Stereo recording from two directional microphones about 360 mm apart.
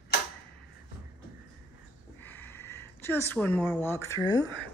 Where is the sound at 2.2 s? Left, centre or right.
Centre.